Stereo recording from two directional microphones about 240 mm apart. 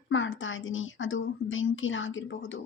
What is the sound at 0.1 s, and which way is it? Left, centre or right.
Speech, left.